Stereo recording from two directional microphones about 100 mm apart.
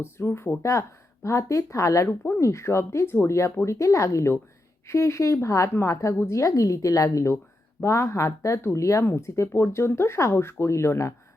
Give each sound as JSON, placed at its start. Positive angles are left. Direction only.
{"t": 0.0, "sound": "a woman's voice", "side_deg": 25}